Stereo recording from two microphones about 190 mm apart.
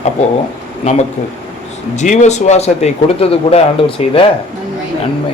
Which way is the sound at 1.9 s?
40° left (ahead or behind).